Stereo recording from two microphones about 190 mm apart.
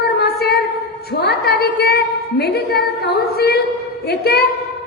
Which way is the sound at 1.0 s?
55° left (ahead or behind).